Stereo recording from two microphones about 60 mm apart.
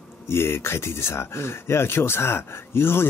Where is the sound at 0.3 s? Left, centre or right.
Left.